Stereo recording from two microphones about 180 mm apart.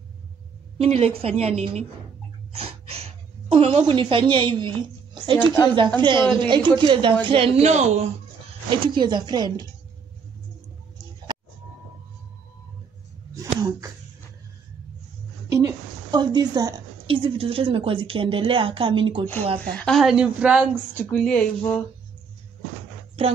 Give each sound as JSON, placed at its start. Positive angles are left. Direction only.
{"t": 0.7, "sound": "a woman's voice", "side_deg": -35}
{"t": 5.4, "sound": "speech", "side_deg": 15}
{"t": 5.9, "sound": "a woman's voice", "side_deg": -25}
{"t": 8.6, "sound": "a woman's voice", "side_deg": -25}
{"t": 13.6, "sound": "a sound", "side_deg": -20}
{"t": 15.6, "sound": "a sound", "side_deg": -20}
{"t": 17.1, "sound": "speech", "side_deg": -30}
{"t": 19.7, "sound": "a woman's voice", "side_deg": 5}
{"t": 20.9, "sound": "speech", "side_deg": 10}
{"t": 23.2, "sound": "speech", "side_deg": -30}